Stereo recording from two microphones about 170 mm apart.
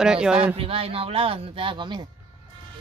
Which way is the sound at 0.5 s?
35° right (ahead or behind).